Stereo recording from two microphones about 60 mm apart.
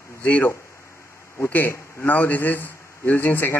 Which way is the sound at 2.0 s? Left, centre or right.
Left.